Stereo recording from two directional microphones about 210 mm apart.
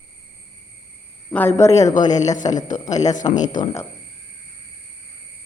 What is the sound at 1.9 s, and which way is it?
Speech, 35° left (ahead or behind).